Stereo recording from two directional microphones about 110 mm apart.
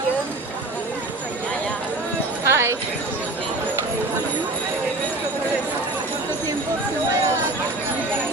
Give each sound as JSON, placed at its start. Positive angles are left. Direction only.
{"t": 2.5, "sound": "clip-clop", "side_deg": -25}